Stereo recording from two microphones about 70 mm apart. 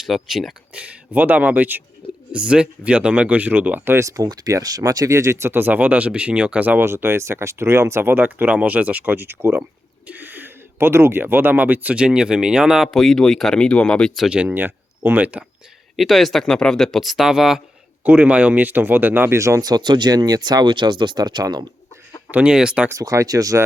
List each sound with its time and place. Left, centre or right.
0.1 s speech: centre
0.7 s speech: right
3.9 s speech: right
5.5 s speech: right
6.8 s speech: right
11.9 s speech: centre
14.3 s speech: centre
14.5 s speech: right
16.0 s speech: centre
18.0 s speech: right
19.3 s speech: right
19.6 s speech: right
22.3 s speech: right
22.9 s speech: right